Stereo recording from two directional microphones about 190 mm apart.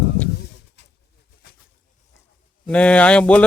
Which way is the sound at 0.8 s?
65° left (ahead or behind).